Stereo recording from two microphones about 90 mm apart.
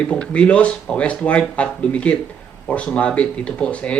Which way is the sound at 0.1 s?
15° left (ahead or behind).